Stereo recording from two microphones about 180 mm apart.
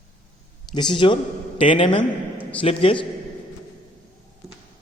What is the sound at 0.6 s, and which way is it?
A man's voice, 25° left (ahead or behind).